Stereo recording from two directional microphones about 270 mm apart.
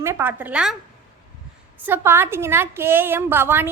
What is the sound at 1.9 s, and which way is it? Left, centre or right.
A woman's voice, centre.